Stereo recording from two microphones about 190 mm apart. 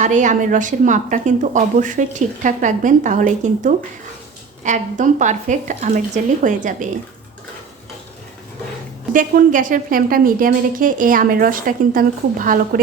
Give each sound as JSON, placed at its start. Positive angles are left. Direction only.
{"t": 0.0, "sound": "a woman's voice", "side_deg": -40}
{"t": 9.1, "sound": "a woman's voice", "side_deg": -45}